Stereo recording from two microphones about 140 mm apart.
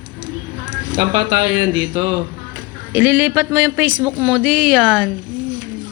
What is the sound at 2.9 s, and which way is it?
A man's voice, 15° right (ahead or behind).